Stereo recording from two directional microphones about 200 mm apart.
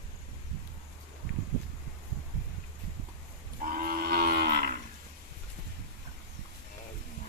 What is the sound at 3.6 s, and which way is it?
Cattle, 45° right (ahead or behind).